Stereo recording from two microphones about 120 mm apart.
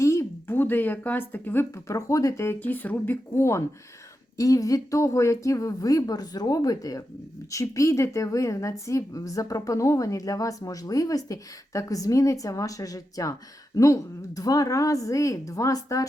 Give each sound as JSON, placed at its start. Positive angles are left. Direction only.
{"t": 0.0, "sound": "a woman's voice", "side_deg": 25}